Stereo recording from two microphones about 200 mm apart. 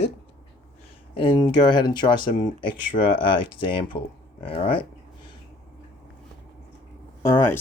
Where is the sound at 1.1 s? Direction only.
25° left (ahead or behind).